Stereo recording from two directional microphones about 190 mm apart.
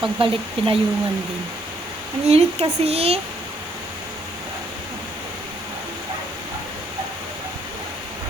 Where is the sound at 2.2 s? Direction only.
35° right (ahead or behind).